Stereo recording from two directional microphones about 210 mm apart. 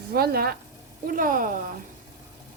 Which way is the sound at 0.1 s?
45° right (ahead or behind).